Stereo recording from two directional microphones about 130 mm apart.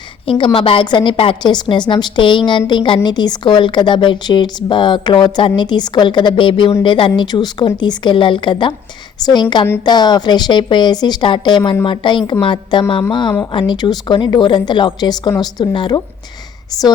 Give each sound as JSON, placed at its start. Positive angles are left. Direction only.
{"t": 0.3, "sound": "a woman's voice", "side_deg": 40}